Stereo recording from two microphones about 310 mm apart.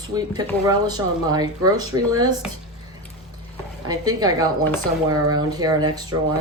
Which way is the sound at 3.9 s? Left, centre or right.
Centre.